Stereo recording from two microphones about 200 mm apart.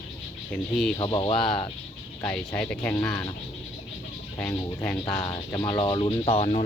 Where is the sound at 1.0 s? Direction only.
25° left (ahead or behind).